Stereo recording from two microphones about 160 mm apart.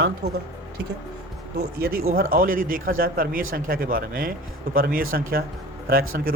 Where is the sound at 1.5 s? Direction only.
70° right (ahead or behind).